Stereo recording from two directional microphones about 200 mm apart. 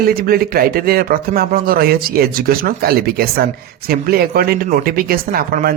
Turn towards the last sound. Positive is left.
turn(degrees=-45)  # may be behind; listen again after turning